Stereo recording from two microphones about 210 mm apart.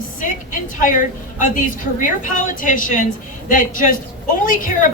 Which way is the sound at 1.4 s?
40° left (ahead or behind).